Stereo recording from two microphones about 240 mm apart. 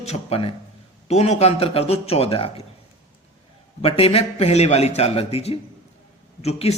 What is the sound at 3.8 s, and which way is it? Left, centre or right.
Speech, left.